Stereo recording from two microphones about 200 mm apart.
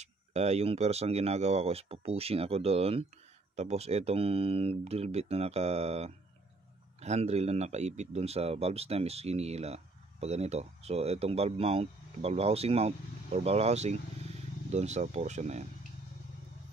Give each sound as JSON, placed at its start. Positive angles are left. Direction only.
{"t": 0.0, "sound": "speech", "side_deg": -35}